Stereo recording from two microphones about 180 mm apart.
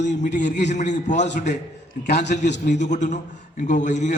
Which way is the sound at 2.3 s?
75° left (ahead or behind).